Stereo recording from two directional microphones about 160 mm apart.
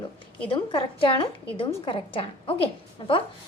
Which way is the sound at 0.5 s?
35° left (ahead or behind).